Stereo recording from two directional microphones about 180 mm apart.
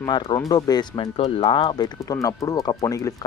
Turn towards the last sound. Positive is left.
turn(degrees=20)  # may be behind; listen again after turning